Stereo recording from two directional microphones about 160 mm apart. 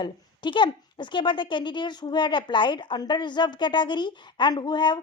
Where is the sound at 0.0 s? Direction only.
30° left (ahead or behind).